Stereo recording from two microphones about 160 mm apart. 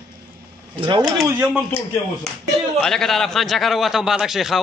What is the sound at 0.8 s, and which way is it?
Speech, 30° right (ahead or behind).